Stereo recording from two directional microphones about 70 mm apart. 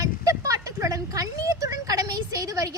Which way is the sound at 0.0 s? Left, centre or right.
Right.